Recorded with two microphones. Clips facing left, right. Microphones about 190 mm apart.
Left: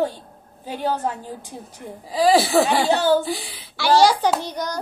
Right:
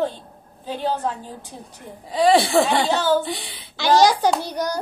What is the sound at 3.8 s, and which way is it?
A child's voice, 15° right (ahead or behind).